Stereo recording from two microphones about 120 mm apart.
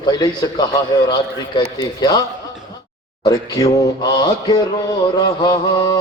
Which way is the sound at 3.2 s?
35° left (ahead or behind).